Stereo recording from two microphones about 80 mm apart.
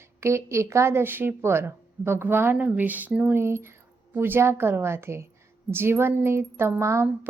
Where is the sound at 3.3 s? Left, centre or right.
Right.